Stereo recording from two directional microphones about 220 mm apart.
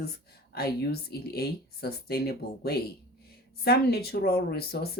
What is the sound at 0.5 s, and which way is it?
Speech, 45° left (ahead or behind).